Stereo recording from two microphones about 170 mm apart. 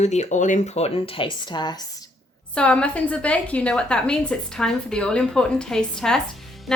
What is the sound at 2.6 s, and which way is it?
A woman's voice, 5° left (ahead or behind).